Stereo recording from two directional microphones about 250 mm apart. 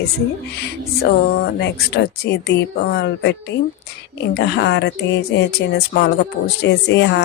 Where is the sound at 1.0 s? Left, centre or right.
Left.